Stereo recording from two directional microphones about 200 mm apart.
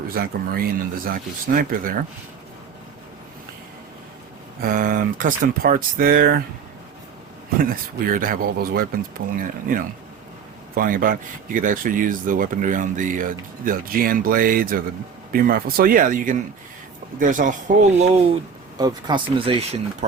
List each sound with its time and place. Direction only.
0.1 s speech: 50° right (ahead or behind)
4.6 s speech: 45° right (ahead or behind)
7.6 s speech: 45° right (ahead or behind)
18.8 s speech: 20° right (ahead or behind)